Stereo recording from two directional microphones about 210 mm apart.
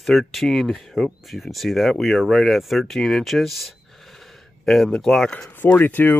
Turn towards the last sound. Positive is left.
turn(degrees=10)  # may be behind; listen again after turning